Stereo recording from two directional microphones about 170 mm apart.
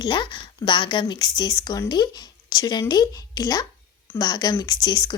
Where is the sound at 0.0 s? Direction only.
25° left (ahead or behind).